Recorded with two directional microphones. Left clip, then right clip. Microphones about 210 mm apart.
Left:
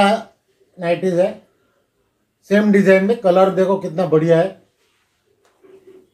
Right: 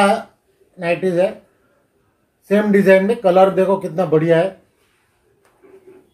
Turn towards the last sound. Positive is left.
turn(degrees=-40)  # may be behind; listen again after turning